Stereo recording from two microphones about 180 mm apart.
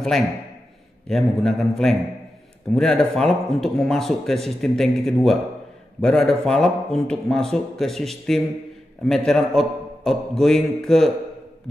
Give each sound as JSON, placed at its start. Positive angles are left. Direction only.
{"t": 0.0, "sound": "a man's voice", "side_deg": 0}